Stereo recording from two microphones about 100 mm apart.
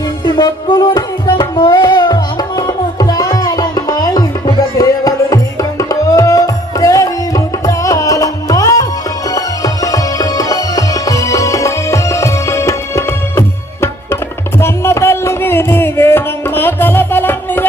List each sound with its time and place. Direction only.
0.2 s music: 45° left (ahead or behind); by 17.6 s 20° left (ahead or behind)